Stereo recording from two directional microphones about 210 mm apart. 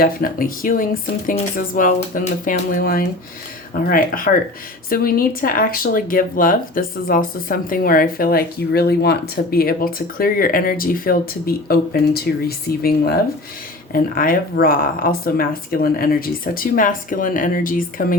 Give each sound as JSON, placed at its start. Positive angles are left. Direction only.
{"t": 0.0, "sound": "speech", "side_deg": 45}